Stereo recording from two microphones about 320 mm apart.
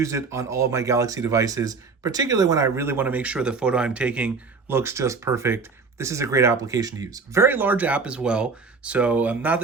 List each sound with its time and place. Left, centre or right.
0.0 s speech: centre